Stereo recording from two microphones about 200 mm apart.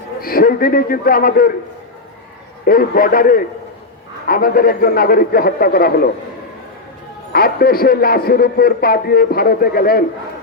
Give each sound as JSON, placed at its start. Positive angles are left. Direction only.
{"t": 0.2, "sound": "a man's voice", "side_deg": 45}
{"t": 2.6, "sound": "a man's voice", "side_deg": 45}
{"t": 7.3, "sound": "a man's voice", "side_deg": 50}